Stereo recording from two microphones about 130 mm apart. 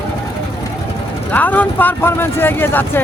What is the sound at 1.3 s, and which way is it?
Speech, 15° left (ahead or behind).